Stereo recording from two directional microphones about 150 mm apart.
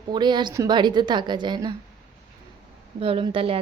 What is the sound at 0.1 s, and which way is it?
A woman's voice, 30° right (ahead or behind).